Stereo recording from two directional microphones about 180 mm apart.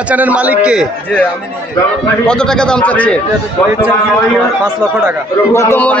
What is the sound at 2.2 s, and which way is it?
Speech, 5° left (ahead or behind).